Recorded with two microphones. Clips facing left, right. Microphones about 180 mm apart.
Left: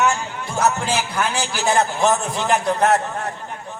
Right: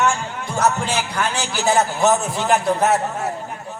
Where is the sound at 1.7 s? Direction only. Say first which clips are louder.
Right 1 dB; 5° right (ahead or behind).